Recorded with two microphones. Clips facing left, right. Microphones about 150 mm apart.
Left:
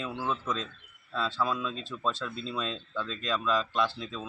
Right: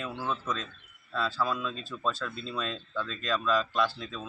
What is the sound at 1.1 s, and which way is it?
A man's voice, 20° left (ahead or behind).